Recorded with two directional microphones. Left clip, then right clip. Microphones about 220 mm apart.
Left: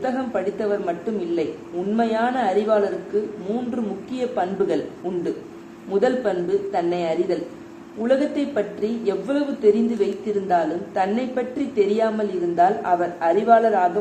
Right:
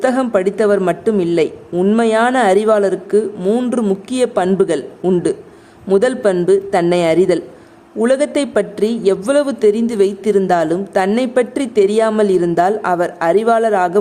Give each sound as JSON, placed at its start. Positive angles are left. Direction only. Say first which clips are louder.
{"t": 0.0, "sound": "a woman's voice", "louder": "right 9 dB", "side_deg": -55}
{"t": 5.9, "sound": "a woman's voice", "louder": "right 7 dB", "side_deg": -55}